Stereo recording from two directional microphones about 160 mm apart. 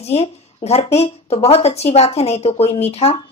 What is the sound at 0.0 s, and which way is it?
Speech, 40° left (ahead or behind).